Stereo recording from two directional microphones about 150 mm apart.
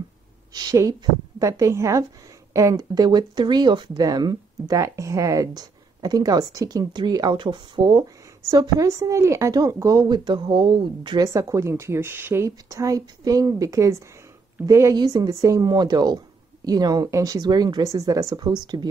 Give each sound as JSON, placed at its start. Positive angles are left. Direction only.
{"t": 0.5, "sound": "speech", "side_deg": -25}
{"t": 11.2, "sound": "speech", "side_deg": -20}